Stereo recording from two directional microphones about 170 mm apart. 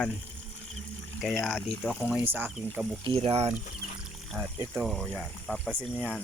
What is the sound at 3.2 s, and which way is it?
Speech, 40° right (ahead or behind).